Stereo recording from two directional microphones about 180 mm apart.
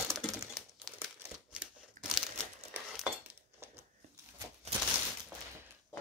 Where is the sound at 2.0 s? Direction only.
45° right (ahead or behind).